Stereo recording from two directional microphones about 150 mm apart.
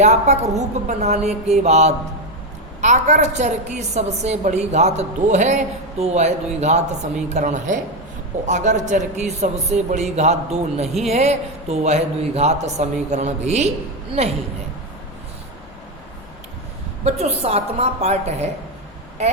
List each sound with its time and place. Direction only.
0.0 s a woman's voice: 50° right (ahead or behind)
17.0 s a woman's voice: 45° right (ahead or behind)